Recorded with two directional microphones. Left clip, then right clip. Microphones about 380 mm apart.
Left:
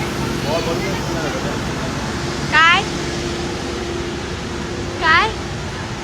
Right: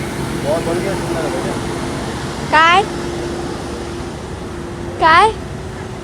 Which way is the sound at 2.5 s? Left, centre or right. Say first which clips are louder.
Right 2 dB; centre.